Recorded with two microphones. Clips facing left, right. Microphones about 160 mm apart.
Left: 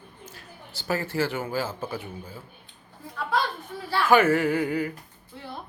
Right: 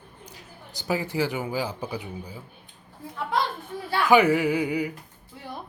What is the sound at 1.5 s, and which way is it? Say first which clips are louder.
Speech: even; 15° right (ahead or behind).